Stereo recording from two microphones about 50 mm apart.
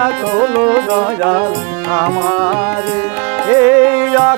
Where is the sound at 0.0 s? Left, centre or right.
Right.